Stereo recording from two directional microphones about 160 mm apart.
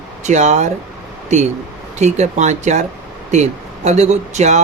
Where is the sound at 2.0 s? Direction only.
45° right (ahead or behind).